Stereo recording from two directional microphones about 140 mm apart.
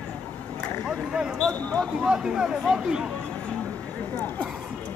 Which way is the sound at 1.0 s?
5° right (ahead or behind).